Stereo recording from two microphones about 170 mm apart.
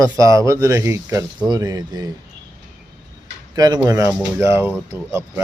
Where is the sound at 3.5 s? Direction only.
20° right (ahead or behind).